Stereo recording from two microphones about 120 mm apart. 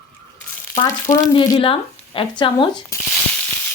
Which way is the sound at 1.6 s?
45° left (ahead or behind).